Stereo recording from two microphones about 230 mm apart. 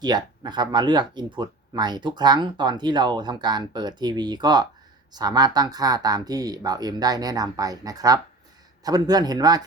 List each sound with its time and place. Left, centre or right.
0.0 s speech: centre